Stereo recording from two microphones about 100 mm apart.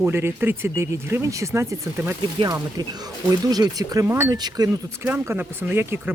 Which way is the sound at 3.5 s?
40° right (ahead or behind).